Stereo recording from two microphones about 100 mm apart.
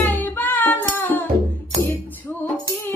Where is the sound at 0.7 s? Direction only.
20° left (ahead or behind).